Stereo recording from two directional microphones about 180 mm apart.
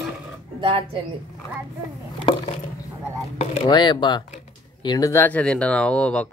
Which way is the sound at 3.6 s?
25° left (ahead or behind).